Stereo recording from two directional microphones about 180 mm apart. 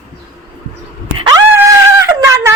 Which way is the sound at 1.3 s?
20° right (ahead or behind).